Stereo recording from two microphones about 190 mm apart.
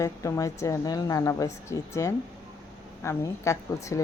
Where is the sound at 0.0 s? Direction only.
15° left (ahead or behind).